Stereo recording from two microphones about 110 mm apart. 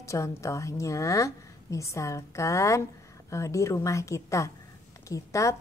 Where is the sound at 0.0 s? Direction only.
25° left (ahead or behind).